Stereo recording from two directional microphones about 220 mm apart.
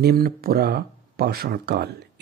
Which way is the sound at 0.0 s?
45° right (ahead or behind).